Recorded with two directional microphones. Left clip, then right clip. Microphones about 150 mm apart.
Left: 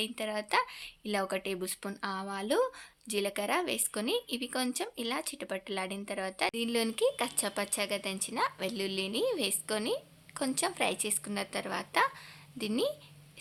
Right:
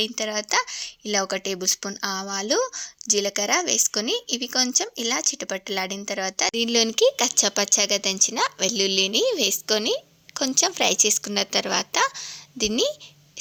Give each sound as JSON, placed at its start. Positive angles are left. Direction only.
{"t": 0.0, "sound": "speech", "side_deg": -40}